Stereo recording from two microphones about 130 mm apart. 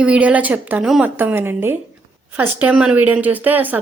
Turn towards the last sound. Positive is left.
turn(degrees=-15)  # may be behind; listen again after turning